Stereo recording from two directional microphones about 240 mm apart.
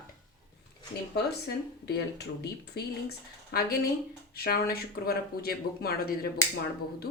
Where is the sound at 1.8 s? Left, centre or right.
Left.